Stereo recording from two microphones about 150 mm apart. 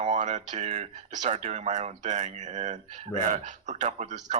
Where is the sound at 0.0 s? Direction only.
50° right (ahead or behind).